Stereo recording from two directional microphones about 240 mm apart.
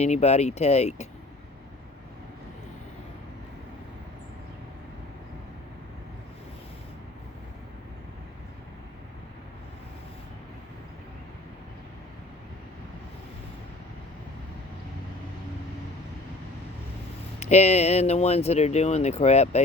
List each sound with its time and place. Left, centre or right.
0.0 s speech: left
17.4 s speech: left